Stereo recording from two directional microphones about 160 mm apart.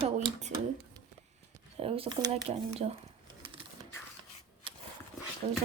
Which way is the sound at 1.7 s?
35° right (ahead or behind).